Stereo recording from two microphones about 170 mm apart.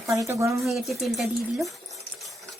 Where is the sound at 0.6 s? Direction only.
Centre (ahead or behind).